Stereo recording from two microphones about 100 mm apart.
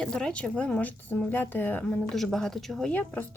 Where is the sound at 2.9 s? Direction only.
20° left (ahead or behind).